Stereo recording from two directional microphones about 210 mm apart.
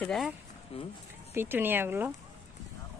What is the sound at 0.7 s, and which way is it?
Speech, 25° left (ahead or behind).